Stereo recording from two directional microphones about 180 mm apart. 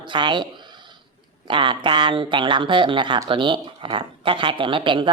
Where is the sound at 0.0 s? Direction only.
25° right (ahead or behind).